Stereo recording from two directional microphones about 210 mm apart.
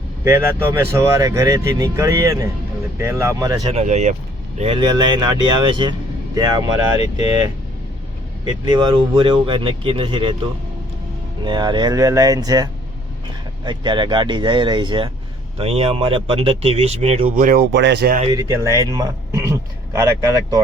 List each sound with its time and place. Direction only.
0.3 s speech: 10° right (ahead or behind)
3.7 s speech: 30° right (ahead or behind)
8.4 s speech: 20° right (ahead or behind)
11.4 s speech: 20° right (ahead or behind)
13.7 s speech: 20° right (ahead or behind); by 18.2 s 50° right (ahead or behind)
18.2 s a man's voice: 20° right (ahead or behind)